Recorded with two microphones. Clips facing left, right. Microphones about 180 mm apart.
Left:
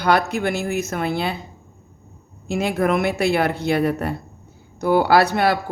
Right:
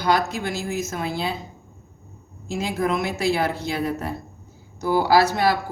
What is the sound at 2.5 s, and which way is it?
Speech, 65° left (ahead or behind).